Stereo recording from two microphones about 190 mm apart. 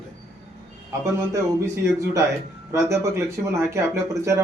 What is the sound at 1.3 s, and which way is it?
Speech, 15° right (ahead or behind).